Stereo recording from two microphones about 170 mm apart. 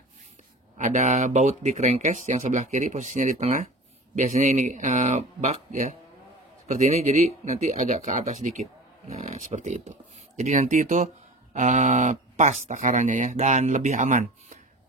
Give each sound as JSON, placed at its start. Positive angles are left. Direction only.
{"t": 0.7, "sound": "speech", "side_deg": -45}